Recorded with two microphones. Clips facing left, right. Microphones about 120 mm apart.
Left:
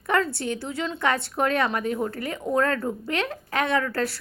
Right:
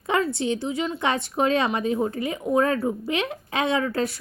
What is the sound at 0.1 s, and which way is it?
A woman's voice, 15° right (ahead or behind).